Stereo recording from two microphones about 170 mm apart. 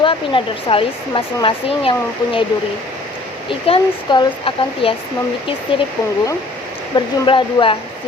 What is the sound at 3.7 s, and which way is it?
Speech, 30° left (ahead or behind).